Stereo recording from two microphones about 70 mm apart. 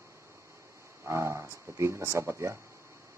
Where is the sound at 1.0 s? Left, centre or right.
Right.